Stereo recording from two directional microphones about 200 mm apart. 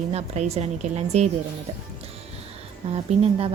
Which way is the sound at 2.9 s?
30° right (ahead or behind).